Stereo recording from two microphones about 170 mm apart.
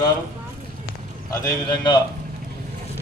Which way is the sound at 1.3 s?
20° left (ahead or behind).